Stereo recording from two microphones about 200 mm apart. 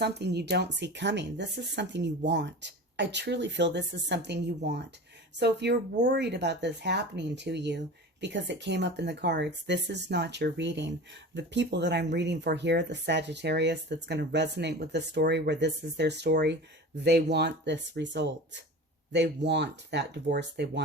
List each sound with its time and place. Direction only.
0.0 s speech: 55° right (ahead or behind)